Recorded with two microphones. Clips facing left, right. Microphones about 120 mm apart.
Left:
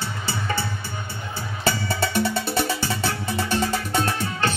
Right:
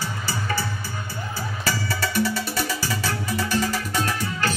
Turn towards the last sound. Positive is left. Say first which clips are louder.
# left 1 dB
turn(degrees=25)  # may be behind; listen again after turning